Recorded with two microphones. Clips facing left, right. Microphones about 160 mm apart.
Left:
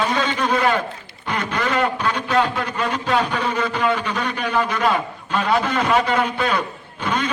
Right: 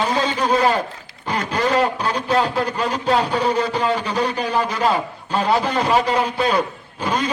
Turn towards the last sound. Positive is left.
turn(degrees=-35)  # may be behind; listen again after turning